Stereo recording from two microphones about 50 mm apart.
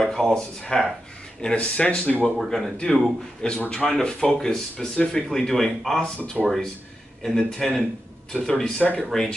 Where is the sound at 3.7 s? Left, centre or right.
Centre.